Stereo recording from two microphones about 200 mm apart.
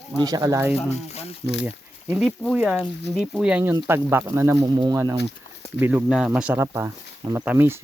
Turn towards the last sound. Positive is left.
turn(degrees=-10)  # may be behind; listen again after turning